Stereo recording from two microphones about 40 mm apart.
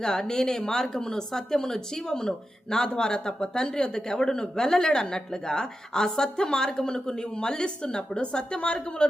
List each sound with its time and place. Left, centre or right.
0.0 s a woman's voice: centre